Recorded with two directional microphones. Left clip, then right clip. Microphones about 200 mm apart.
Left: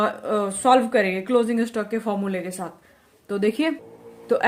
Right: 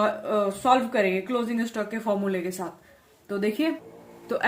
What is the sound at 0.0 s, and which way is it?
Speech, 35° left (ahead or behind).